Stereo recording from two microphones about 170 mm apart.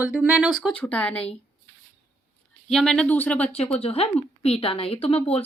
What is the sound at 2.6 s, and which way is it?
Speech, 5° left (ahead or behind).